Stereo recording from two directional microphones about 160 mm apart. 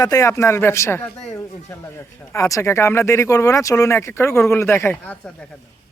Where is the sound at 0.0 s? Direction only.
20° left (ahead or behind).